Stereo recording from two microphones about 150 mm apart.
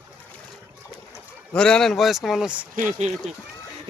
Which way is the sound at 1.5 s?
5° left (ahead or behind).